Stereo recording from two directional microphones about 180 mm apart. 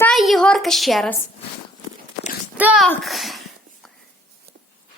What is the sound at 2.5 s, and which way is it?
Speech, 5° right (ahead or behind).